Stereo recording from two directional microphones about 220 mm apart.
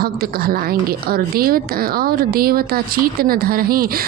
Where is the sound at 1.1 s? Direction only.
40° right (ahead or behind).